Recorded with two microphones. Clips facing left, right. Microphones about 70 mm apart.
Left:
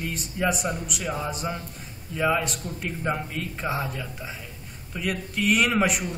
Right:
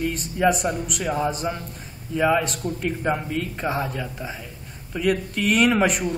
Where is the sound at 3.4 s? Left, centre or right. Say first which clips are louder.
Right 4 dB; centre.